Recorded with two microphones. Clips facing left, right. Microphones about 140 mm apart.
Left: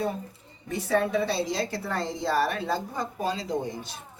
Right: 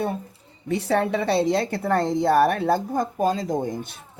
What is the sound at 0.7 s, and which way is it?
A woman's voice, 70° right (ahead or behind).